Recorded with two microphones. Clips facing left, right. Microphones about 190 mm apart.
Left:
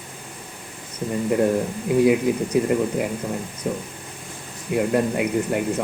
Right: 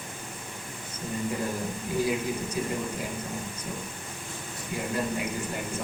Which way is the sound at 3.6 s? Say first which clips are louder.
Left 9 dB; 60° left (ahead or behind).